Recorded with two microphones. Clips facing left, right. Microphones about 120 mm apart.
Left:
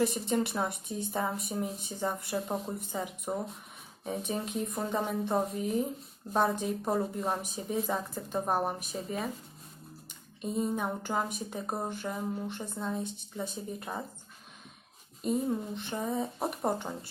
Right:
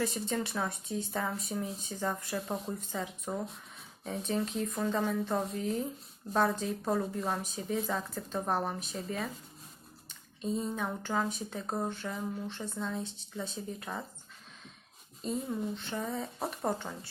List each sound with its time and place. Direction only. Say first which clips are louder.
0.0 s a woman's voice: left 4 dB; 20° left (ahead or behind)
10.4 s a woman's voice: left 2 dB; 10° left (ahead or behind)
15.4 s a woman's voice: left 2 dB; 15° left (ahead or behind)